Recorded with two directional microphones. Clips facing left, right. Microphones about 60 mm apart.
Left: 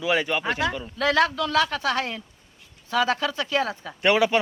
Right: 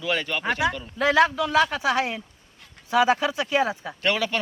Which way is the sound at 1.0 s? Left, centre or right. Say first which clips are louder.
Right 2 dB; centre.